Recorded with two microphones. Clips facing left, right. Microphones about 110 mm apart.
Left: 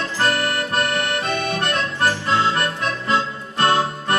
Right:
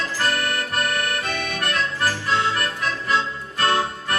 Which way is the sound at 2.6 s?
30° left (ahead or behind).